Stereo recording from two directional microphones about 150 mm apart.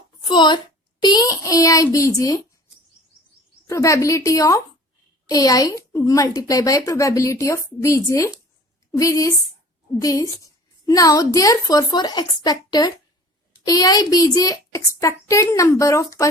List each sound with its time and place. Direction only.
0.2 s a woman's voice: 30° left (ahead or behind)
3.7 s speech: 20° left (ahead or behind)